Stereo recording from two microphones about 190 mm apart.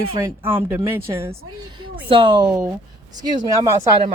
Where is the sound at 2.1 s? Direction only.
25° right (ahead or behind).